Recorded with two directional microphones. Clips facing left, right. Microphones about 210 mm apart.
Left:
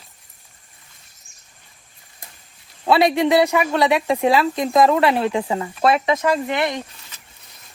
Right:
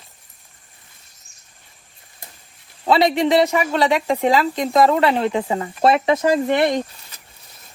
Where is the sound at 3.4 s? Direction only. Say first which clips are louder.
Left 1 dB; 15° right (ahead or behind).